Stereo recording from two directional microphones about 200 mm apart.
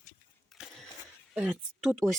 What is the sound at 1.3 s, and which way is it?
Speech, 5° right (ahead or behind).